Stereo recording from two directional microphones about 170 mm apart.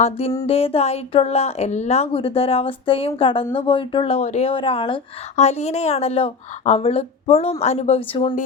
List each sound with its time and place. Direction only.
0.0 s a woman's voice: 40° left (ahead or behind)